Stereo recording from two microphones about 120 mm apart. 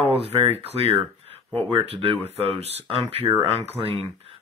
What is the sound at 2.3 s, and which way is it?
Speech, 60° right (ahead or behind).